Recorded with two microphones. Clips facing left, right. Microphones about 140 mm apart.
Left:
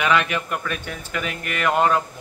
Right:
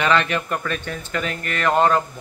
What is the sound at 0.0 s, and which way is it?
Speech, 5° left (ahead or behind).